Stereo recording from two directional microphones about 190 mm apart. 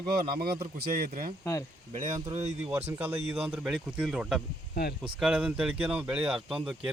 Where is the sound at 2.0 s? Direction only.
20° right (ahead or behind).